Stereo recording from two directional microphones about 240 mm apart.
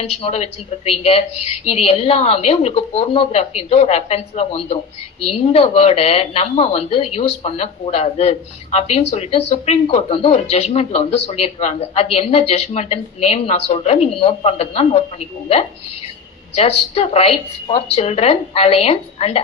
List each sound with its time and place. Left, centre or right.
0.0 s a woman's voice: left
16.6 s a woman's voice: left